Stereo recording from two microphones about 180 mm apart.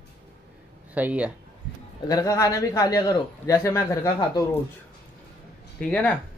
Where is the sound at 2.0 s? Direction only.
20° left (ahead or behind).